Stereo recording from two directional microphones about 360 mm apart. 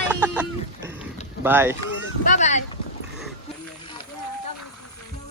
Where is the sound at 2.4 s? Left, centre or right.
Centre.